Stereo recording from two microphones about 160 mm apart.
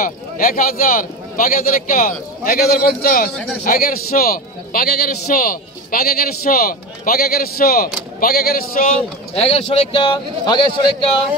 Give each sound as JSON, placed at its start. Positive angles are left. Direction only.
{"t": 0.0, "sound": "a man's voice", "side_deg": 60}
{"t": 9.3, "sound": "a man's voice", "side_deg": 35}